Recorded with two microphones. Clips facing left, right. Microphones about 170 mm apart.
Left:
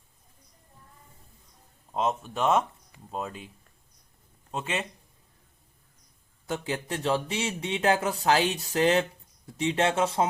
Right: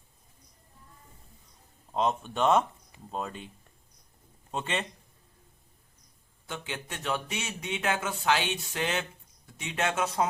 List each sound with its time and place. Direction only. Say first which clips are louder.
1.9 s speech: even; centre (ahead or behind)
4.5 s speech: left 1 dB; 5° left (ahead or behind)
6.5 s speech: left 7 dB; 35° left (ahead or behind)